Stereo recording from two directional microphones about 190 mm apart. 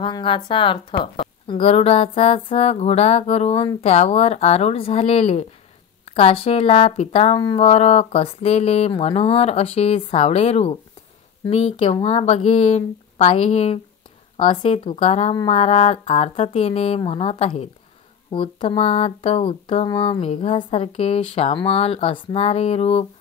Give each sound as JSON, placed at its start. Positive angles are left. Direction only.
{"t": 0.0, "sound": "a woman's voice", "side_deg": 25}